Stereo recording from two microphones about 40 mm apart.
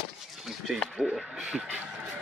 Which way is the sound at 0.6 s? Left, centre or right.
Centre.